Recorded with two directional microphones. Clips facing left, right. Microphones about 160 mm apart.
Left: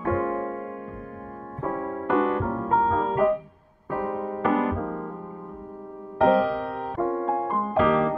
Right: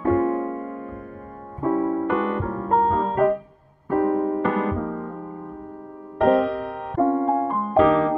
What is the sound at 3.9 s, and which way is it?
Keyboard, 40° right (ahead or behind).